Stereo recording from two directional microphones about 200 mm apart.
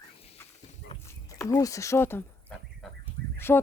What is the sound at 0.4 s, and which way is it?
Horse, 10° left (ahead or behind).